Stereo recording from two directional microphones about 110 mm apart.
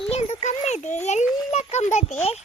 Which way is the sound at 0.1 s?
90° left.